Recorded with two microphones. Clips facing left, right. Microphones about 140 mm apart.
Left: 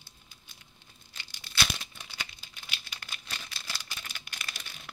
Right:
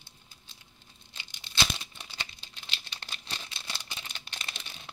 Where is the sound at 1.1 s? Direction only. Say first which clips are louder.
Right 1 dB; 20° right (ahead or behind).